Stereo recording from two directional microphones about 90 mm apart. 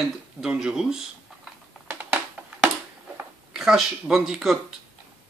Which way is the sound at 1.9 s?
15° right (ahead or behind).